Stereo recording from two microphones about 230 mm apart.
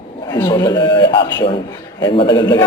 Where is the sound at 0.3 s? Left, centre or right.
Centre.